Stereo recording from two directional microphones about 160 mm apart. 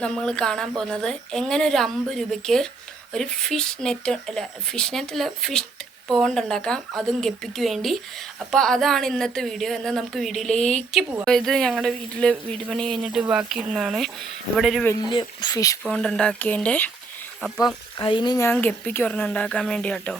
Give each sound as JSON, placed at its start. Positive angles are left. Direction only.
{"t": 0.0, "sound": "speech", "side_deg": 5}
{"t": 13.1, "sound": "speech", "side_deg": -10}
{"t": 15.1, "sound": "speech", "side_deg": 30}
{"t": 15.8, "sound": "speech", "side_deg": 5}
{"t": 18.0, "sound": "speech", "side_deg": 30}
{"t": 18.4, "sound": "a woman's voice", "side_deg": 10}